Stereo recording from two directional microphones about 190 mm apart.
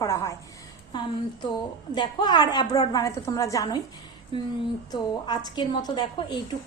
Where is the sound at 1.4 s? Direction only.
25° left (ahead or behind).